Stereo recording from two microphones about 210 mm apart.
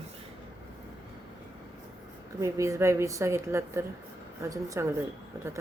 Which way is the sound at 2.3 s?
15° right (ahead or behind).